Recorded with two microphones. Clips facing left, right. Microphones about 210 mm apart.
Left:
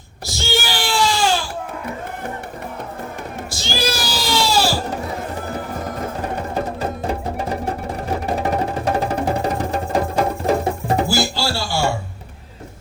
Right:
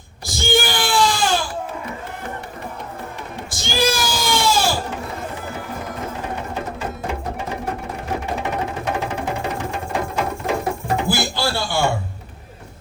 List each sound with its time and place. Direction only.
0.3 s wail: 50° right (ahead or behind)
3.5 s a sound: 50° right (ahead or behind)
6.5 s music: 40° left (ahead or behind)
11.1 s music: 55° right (ahead or behind)